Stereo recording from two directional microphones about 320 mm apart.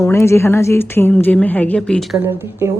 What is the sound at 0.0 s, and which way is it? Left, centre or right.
A woman's voice, centre.